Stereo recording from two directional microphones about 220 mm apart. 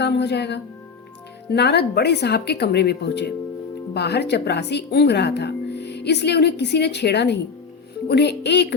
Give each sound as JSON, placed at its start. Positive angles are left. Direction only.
{"t": 0.0, "sound": "speech", "side_deg": 50}